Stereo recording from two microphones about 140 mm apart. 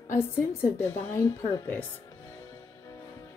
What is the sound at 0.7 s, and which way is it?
A woman's voice, 15° left (ahead or behind).